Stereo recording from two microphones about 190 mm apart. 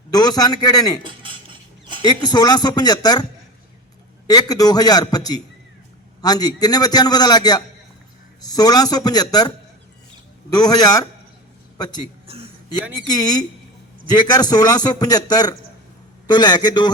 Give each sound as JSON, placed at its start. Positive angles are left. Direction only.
{"t": 0.1, "sound": "a man's voice", "side_deg": 20}
{"t": 1.0, "sound": "cutlery", "side_deg": -25}
{"t": 2.0, "sound": "a man's voice", "side_deg": 20}
{"t": 4.3, "sound": "a man's voice", "side_deg": 20}
{"t": 10.5, "sound": "a man's voice", "side_deg": 20}
{"t": 12.3, "sound": "a sound", "side_deg": -30}
{"t": 13.0, "sound": "a man's voice", "side_deg": 20}